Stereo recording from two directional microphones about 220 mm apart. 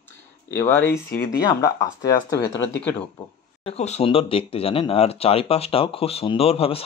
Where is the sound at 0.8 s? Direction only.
45° left (ahead or behind).